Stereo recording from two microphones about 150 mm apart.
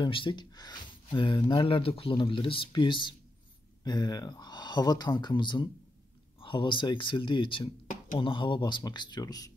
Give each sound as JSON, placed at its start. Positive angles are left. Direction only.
{"t": 0.0, "sound": "speech", "side_deg": 35}